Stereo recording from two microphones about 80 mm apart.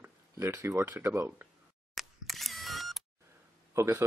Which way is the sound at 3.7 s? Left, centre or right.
Right.